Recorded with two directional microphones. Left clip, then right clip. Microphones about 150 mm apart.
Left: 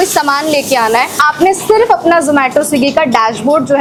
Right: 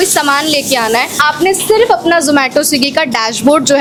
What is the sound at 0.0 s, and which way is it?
A woman's voice, 20° right (ahead or behind).